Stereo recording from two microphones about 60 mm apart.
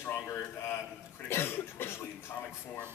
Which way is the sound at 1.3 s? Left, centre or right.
Left.